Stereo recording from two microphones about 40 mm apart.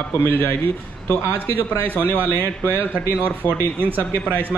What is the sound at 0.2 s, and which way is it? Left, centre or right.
Speech, left.